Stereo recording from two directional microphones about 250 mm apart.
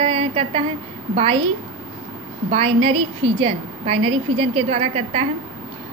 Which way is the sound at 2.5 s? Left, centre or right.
Right.